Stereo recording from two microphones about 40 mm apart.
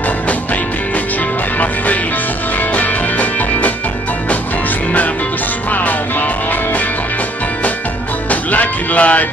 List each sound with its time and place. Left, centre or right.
0.3 s music: left
2.7 s music: left
5.7 s music: left
8.3 s music: left